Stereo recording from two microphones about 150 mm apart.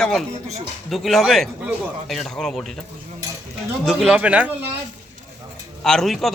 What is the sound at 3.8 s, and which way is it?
Speech, centre (ahead or behind).